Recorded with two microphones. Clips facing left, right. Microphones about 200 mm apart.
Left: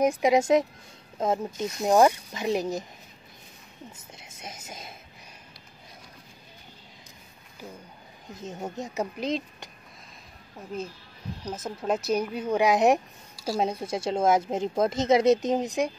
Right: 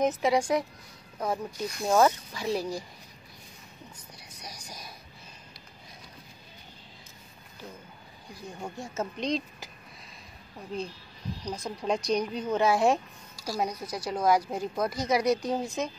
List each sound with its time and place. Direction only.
0.0 s a woman's voice: 15° left (ahead or behind)
4.1 s music: 25° left (ahead or behind)
8.3 s a woman's voice: 20° left (ahead or behind); by 9.7 s 5° left (ahead or behind)
11.4 s a woman's voice: 5° left (ahead or behind)